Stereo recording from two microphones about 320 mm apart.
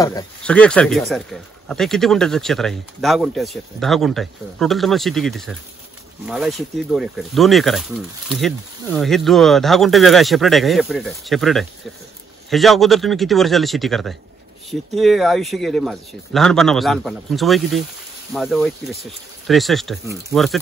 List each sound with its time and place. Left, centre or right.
0.0 s speech: centre